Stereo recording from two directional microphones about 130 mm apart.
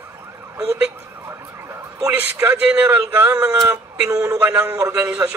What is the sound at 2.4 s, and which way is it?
A man's voice, 10° right (ahead or behind).